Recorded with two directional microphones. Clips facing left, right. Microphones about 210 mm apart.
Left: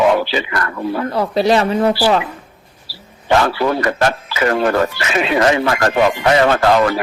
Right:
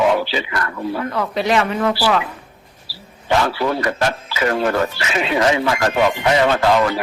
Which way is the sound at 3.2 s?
60° left (ahead or behind).